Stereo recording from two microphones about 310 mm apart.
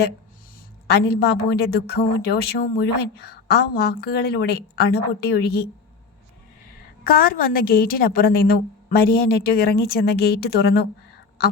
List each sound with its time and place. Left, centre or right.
0.9 s a woman's voice: left
7.0 s a woman's voice: left